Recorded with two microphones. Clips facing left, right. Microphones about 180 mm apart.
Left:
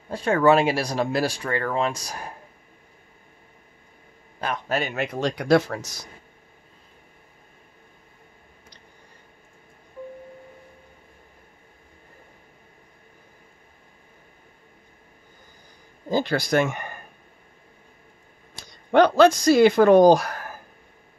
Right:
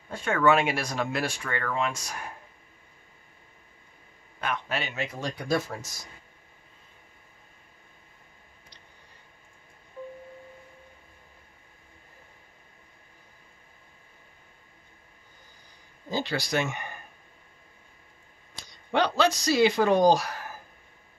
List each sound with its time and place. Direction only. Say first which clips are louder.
0.1 s speech: left 5 dB; 35° left (ahead or behind)
4.4 s a man's voice: left 5 dB; 40° left (ahead or behind)
4.9 s speech: left 7 dB; 65° left (ahead or behind); by 5.8 s 80° left
16.1 s speech: left 7 dB; 50° left (ahead or behind)
18.5 s speech: left 7 dB; 50° left (ahead or behind)